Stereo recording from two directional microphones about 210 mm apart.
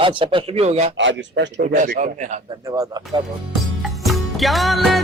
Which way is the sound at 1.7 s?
40° right (ahead or behind).